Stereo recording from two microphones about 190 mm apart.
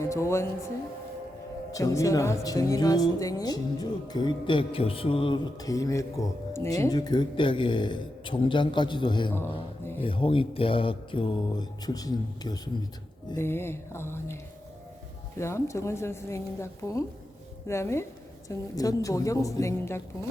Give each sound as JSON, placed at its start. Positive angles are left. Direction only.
{"t": 0.0, "sound": "speech", "side_deg": 15}
{"t": 1.7, "sound": "a woman's voice", "side_deg": 15}
{"t": 15.4, "sound": "a woman's voice", "side_deg": 15}